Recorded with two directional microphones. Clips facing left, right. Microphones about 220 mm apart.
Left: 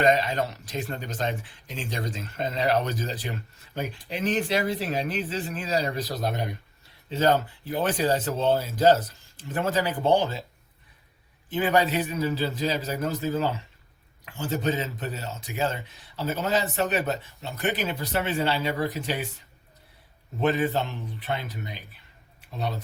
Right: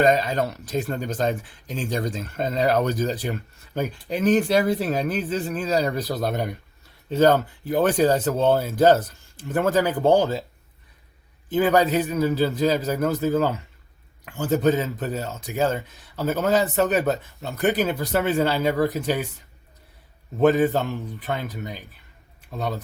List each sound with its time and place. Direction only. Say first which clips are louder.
0.0 s speech: right 3 dB; 40° right (ahead or behind)
11.5 s speech: right 5 dB; 40° right (ahead or behind)
20.5 s speech: right 5 dB; 45° right (ahead or behind)